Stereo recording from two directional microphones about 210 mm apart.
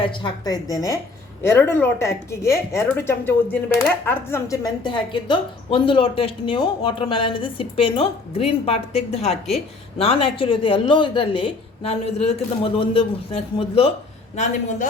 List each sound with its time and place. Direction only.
0.0 s a woman's voice: 25° left (ahead or behind)